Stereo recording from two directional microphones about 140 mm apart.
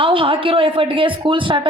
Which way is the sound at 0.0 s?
40° right (ahead or behind).